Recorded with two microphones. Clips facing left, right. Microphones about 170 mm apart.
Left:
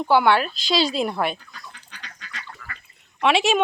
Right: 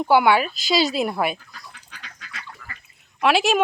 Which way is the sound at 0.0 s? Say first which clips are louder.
Right 1 dB; 10° right (ahead or behind).